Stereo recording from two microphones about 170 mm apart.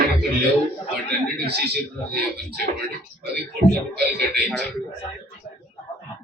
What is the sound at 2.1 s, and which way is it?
Speech, 70° right (ahead or behind).